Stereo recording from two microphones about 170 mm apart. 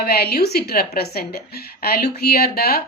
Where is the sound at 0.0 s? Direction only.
65° left (ahead or behind).